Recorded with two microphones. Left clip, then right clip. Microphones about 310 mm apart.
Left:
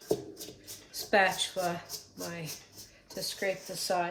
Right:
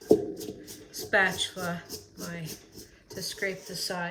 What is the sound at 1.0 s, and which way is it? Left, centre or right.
Speech, left.